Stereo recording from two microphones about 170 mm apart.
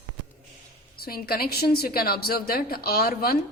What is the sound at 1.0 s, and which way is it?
A woman's voice, 65° left (ahead or behind).